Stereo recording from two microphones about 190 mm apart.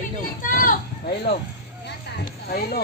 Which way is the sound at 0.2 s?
45° left (ahead or behind).